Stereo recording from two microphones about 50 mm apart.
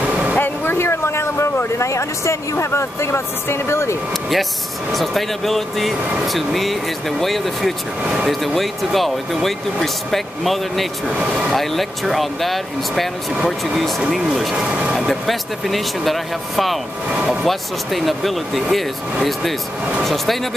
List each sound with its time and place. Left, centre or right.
0.0 s vehicle: right
0.4 s a sound: left
4.9 s speech: centre
14.6 s speech: centre
15.0 s speech: centre
20.0 s speech: centre